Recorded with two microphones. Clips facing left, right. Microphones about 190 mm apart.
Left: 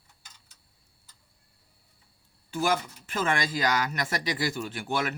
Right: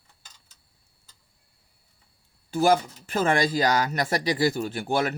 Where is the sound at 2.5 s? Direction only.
35° right (ahead or behind).